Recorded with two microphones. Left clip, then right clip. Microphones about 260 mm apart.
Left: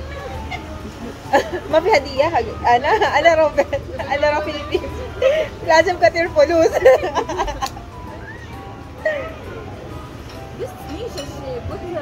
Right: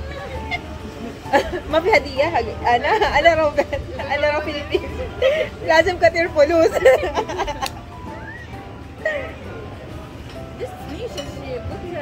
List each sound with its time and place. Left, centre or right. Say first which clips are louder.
1.3 s speech: left 2 dB; centre